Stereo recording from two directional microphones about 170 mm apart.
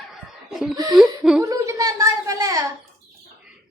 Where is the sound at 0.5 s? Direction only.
Centre (ahead or behind).